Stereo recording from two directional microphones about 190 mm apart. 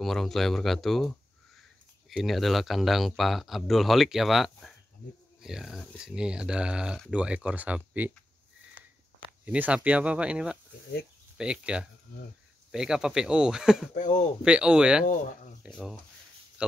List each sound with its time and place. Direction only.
0.0 s speech: centre (ahead or behind)
9.4 s speech: 5° right (ahead or behind)
13.9 s a man's voice: 40° left (ahead or behind)
14.4 s speech: 5° right (ahead or behind)